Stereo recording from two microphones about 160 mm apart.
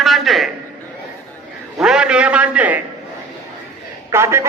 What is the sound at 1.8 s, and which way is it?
A man's voice, 5° right (ahead or behind).